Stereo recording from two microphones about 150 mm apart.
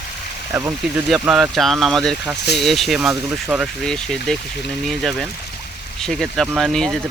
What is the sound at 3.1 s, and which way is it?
Speech, 10° right (ahead or behind).